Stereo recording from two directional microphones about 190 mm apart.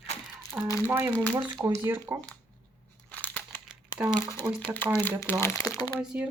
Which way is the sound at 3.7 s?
5° right (ahead or behind).